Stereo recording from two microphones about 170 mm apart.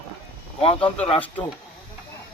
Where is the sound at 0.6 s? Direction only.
35° left (ahead or behind).